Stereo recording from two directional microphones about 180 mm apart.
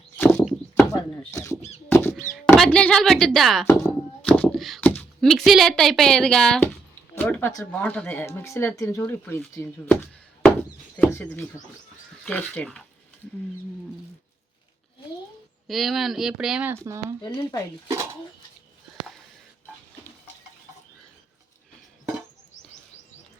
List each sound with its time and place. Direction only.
0.2 s horse: 10° left (ahead or behind)
1.3 s speech: 20° left (ahead or behind)
1.9 s a sound: 10° left (ahead or behind)
2.3 s speech: 5° left (ahead or behind)
3.7 s a sound: 10° left (ahead or behind)
7.2 s speech: 10° left (ahead or behind)
15.6 s speech: centre (ahead or behind); by 17.2 s 15° right (ahead or behind)
17.2 s speech: 20° left (ahead or behind)